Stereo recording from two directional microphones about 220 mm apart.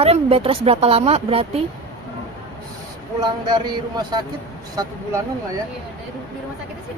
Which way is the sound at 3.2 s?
20° right (ahead or behind).